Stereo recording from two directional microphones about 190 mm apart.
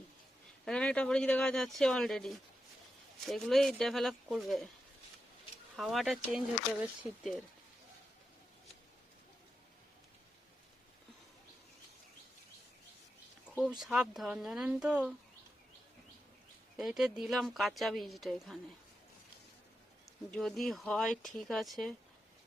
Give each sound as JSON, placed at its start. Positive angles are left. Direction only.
{"t": 0.6, "sound": "a woman's voice", "side_deg": 5}
{"t": 5.7, "sound": "a woman's voice", "side_deg": 0}
{"t": 7.1, "sound": "speech", "side_deg": 30}
{"t": 13.6, "sound": "a woman's voice", "side_deg": 0}
{"t": 16.7, "sound": "a woman's voice", "side_deg": 0}
{"t": 20.3, "sound": "a woman's voice", "side_deg": 0}